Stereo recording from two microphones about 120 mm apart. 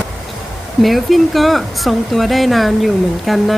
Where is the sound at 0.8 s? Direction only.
Centre (ahead or behind).